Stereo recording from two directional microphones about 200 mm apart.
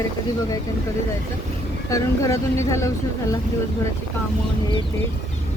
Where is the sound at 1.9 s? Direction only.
15° left (ahead or behind).